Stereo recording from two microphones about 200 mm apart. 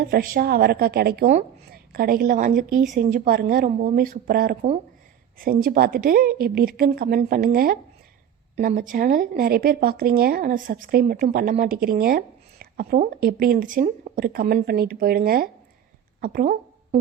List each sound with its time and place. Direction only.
0.0 s a woman's voice: 45° right (ahead or behind)